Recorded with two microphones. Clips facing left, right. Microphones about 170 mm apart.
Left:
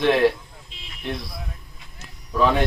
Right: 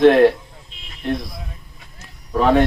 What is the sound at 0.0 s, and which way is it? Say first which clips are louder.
Speech: right 7 dB; 50° right (ahead or behind).